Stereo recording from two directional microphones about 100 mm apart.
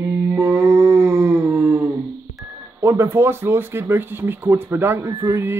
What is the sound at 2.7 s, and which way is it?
Speech, 25° right (ahead or behind).